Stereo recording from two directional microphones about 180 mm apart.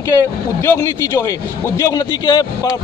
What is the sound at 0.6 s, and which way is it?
A man's voice, 15° left (ahead or behind).